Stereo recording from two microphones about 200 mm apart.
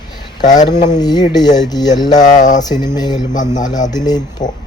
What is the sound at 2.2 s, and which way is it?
Speech, 40° left (ahead or behind).